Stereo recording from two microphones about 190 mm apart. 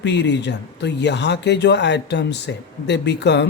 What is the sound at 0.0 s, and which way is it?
Speech, 65° left (ahead or behind).